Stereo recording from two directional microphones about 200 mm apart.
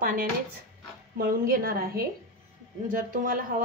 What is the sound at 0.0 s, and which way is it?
A woman's voice, 45° right (ahead or behind).